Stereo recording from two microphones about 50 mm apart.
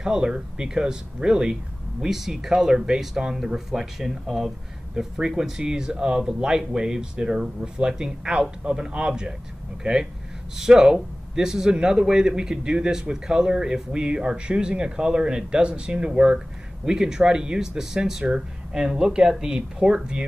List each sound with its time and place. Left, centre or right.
0.0 s a man's voice: centre
2.0 s a man's voice: centre